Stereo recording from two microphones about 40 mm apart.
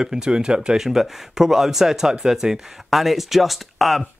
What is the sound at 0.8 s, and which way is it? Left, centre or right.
Speech, centre.